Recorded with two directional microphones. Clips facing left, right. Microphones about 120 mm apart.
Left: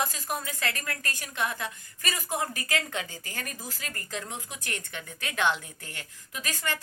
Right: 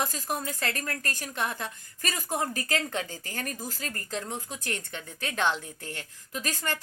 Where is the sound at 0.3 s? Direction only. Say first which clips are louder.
Even; 40° right (ahead or behind).